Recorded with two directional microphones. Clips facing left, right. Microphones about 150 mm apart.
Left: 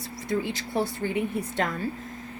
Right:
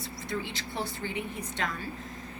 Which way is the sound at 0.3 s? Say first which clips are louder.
Left 7 dB; 45° left (ahead or behind).